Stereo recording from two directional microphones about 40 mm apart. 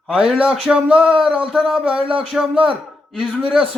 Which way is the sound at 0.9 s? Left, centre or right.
Right.